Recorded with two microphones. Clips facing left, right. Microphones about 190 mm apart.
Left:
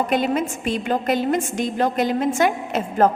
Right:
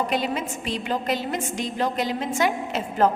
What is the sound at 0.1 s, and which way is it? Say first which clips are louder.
A woman's voice: left 5 dB; 50° left (ahead or behind).